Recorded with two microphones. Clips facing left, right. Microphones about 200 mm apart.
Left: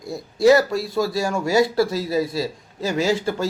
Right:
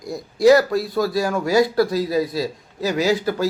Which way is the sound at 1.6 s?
25° left (ahead or behind).